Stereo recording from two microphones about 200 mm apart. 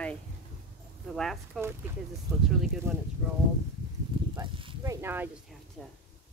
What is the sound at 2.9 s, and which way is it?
Speech, 15° right (ahead or behind).